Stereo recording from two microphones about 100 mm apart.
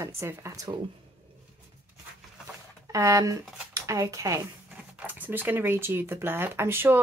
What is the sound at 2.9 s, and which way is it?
Speech, 35° right (ahead or behind).